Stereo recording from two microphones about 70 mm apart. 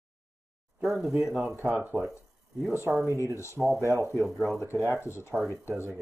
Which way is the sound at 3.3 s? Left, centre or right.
Left.